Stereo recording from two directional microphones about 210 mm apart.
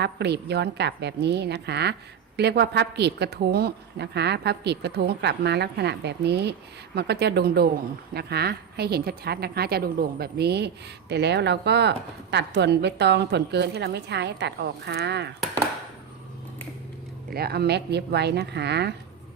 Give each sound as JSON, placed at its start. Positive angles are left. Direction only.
{"t": 0.0, "sound": "a woman's voice", "side_deg": -55}
{"t": 17.3, "sound": "a woman's voice", "side_deg": -50}